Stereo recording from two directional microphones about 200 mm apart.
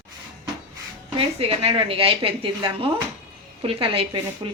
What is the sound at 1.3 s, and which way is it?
Speech, 30° right (ahead or behind).